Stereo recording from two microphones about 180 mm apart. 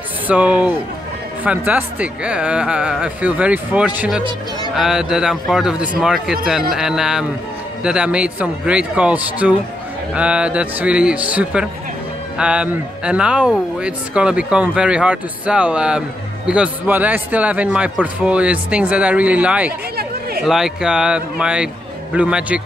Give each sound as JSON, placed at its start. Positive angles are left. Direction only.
{"t": 0.3, "sound": "speech", "side_deg": -5}